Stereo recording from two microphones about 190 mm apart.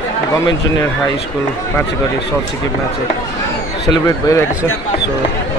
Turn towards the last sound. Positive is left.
turn(degrees=15)  # may be behind; listen again after turning